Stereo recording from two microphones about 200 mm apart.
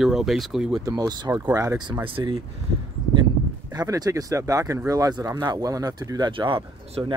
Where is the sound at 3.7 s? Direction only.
20° right (ahead or behind).